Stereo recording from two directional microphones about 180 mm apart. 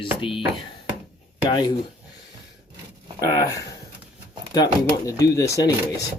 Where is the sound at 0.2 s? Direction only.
30° left (ahead or behind).